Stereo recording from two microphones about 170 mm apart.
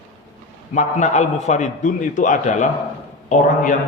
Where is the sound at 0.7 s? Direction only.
45° left (ahead or behind).